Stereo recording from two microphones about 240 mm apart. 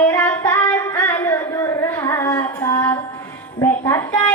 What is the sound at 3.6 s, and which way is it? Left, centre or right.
Music, centre.